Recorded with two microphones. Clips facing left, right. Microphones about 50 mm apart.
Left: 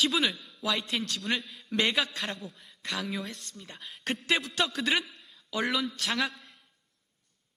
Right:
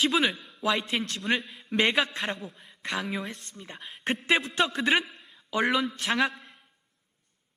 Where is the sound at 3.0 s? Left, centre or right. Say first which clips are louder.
Right 2 dB; centre.